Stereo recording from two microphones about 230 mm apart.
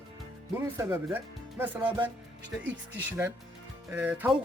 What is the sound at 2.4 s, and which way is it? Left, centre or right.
Speech, right.